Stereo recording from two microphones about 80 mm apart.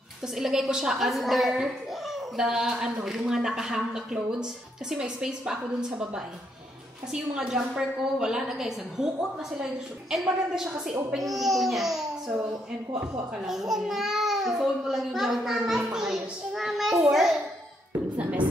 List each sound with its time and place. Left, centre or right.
0.4 s a child's voice: centre
12.9 s speech: right
13.5 s a child's voice: centre